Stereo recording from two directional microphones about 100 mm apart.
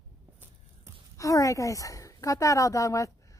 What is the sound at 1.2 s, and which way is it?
Speech, 35° left (ahead or behind).